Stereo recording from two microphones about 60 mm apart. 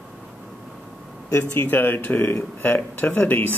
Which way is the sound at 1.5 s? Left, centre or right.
Left.